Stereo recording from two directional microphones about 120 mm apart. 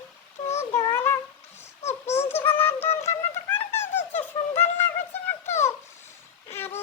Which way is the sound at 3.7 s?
20° left (ahead or behind).